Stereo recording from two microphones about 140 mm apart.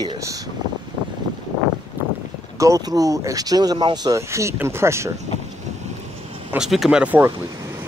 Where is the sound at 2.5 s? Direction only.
25° right (ahead or behind).